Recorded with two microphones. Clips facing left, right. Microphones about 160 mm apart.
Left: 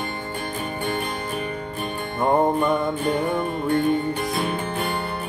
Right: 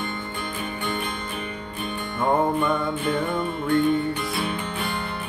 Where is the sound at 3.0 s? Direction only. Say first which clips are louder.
Left 2 dB; 40° left (ahead or behind).